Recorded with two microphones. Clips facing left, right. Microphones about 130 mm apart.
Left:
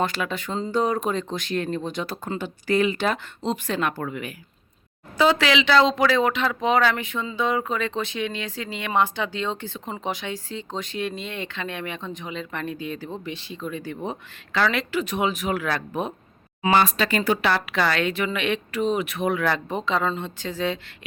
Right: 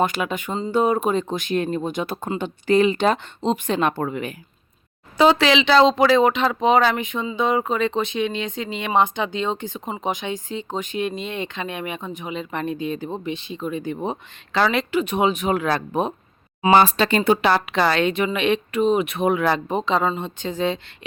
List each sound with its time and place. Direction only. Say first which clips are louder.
0.0 s speech: right 4 dB; 15° right (ahead or behind)